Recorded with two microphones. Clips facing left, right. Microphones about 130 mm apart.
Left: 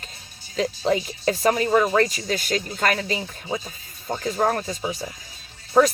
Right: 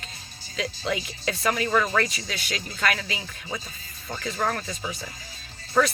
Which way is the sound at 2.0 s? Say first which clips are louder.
Left 7 dB; 45° left (ahead or behind).